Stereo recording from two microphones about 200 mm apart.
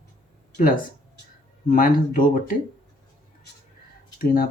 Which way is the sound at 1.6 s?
45° left (ahead or behind).